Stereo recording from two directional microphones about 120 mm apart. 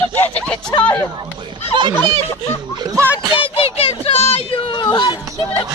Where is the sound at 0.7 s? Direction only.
35° left (ahead or behind).